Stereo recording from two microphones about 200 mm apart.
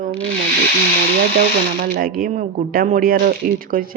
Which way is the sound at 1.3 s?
50° right (ahead or behind).